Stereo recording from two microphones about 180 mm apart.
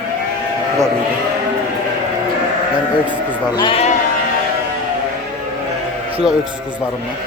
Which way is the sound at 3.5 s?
30° left (ahead or behind).